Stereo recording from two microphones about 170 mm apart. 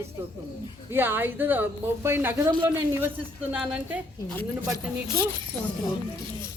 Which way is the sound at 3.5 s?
10° right (ahead or behind).